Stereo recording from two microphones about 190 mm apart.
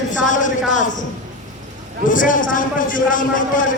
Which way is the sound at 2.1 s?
45° left (ahead or behind).